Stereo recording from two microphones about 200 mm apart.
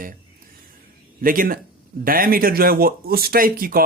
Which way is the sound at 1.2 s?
45° right (ahead or behind).